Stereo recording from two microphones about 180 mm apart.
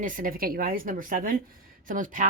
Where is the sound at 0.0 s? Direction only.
50° right (ahead or behind).